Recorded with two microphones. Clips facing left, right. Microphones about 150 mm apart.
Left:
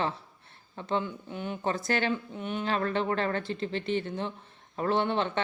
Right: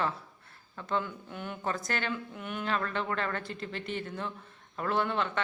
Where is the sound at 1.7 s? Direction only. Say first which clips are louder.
Left 5 dB; 30° left (ahead or behind).